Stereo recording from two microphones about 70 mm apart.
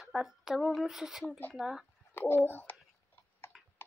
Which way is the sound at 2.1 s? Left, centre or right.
Left.